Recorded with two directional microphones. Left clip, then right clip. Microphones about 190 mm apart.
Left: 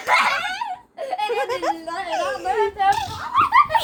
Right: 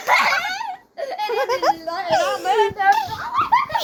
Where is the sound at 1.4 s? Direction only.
25° right (ahead or behind).